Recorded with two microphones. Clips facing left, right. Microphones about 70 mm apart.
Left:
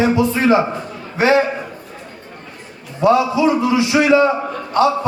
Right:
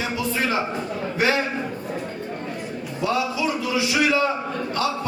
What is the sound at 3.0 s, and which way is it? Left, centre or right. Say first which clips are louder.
A man's voice: left 10 dB; left.